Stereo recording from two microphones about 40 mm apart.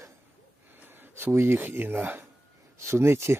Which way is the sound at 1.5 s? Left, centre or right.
Right.